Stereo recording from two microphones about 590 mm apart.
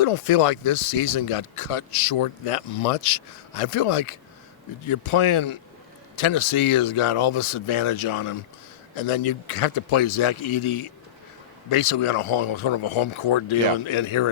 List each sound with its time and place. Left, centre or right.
0.0 s speech: left
9.0 s speech: left